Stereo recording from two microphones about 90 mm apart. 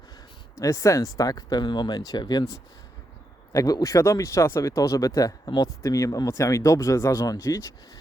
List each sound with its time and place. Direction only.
0.6 s speech: 35° left (ahead or behind)
3.5 s speech: 40° left (ahead or behind)